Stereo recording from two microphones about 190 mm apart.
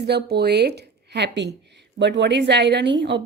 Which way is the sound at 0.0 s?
60° right (ahead or behind).